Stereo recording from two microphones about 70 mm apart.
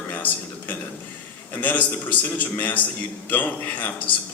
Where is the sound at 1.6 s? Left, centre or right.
Left.